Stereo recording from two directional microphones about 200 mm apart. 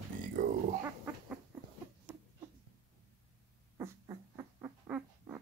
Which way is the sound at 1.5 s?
10° right (ahead or behind).